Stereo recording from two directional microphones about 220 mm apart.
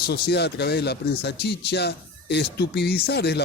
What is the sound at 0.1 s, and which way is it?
A man's voice, 50° left (ahead or behind).